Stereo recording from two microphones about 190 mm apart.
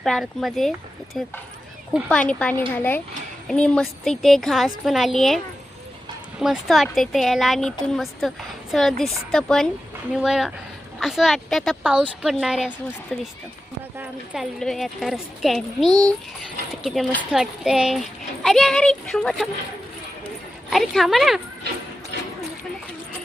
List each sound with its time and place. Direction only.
0.0 s a child's voice: centre (ahead or behind)
1.9 s a child's voice: 5° left (ahead or behind)
6.4 s a child's voice: centre (ahead or behind)
15.9 s a child's voice: 20° right (ahead or behind)
16.8 s a child's voice: centre (ahead or behind)
20.7 s a child's voice: centre (ahead or behind)